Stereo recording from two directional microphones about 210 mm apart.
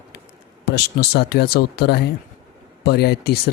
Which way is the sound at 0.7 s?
50° left (ahead or behind).